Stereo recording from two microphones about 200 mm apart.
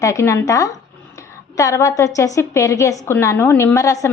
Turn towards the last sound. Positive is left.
turn(degrees=15)  # may be behind; listen again after turning